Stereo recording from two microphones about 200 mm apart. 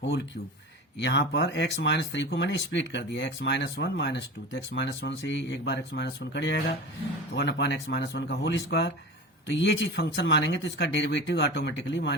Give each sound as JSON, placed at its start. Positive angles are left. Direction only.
{"t": 0.9, "sound": "speech", "side_deg": 60}